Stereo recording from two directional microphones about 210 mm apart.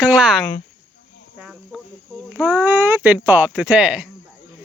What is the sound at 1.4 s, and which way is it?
Cricket, centre (ahead or behind).